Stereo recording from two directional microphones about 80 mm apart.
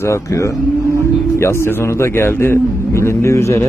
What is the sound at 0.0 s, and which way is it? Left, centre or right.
Speech, left.